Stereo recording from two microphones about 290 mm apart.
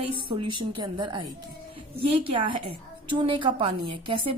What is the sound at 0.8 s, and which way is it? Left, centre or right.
Speech, centre.